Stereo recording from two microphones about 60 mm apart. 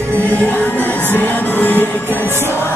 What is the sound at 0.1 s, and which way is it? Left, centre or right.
Music, left.